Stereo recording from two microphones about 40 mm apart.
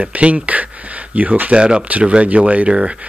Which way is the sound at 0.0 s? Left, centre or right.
Right.